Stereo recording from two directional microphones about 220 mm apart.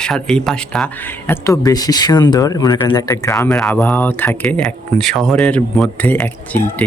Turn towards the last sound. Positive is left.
turn(degrees=5)  # may be behind; listen again after turning